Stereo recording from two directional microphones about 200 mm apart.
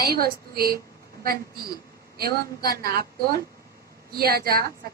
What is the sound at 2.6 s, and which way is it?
A woman's voice, 50° right (ahead or behind).